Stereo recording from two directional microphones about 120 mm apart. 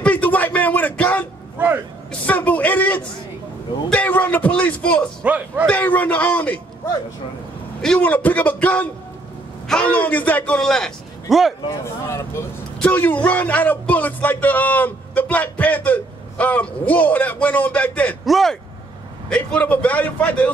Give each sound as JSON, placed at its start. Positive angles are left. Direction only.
{"t": 0.0, "sound": "a sound", "side_deg": 15}
{"t": 2.2, "sound": "a sound", "side_deg": 15}
{"t": 5.2, "sound": "speech", "side_deg": -10}
{"t": 5.7, "sound": "speech", "side_deg": 15}
{"t": 7.8, "sound": "a man's voice", "side_deg": 10}
{"t": 11.8, "sound": "speech", "side_deg": 25}
{"t": 18.2, "sound": "speech", "side_deg": 0}